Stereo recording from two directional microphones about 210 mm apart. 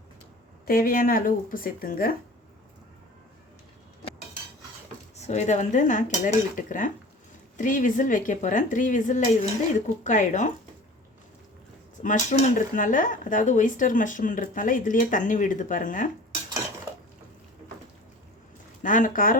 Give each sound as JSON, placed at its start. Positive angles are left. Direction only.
{"t": 0.7, "sound": "speech", "side_deg": 45}
{"t": 5.1, "sound": "speech", "side_deg": 30}
{"t": 12.0, "sound": "speech", "side_deg": 35}
{"t": 16.9, "sound": "dishes", "side_deg": -10}
{"t": 18.8, "sound": "speech", "side_deg": 40}